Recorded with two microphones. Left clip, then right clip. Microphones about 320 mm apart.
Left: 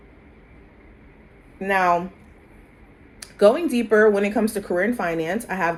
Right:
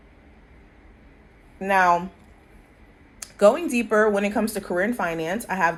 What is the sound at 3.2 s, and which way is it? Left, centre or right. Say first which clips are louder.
Speech: left 1 dB; right.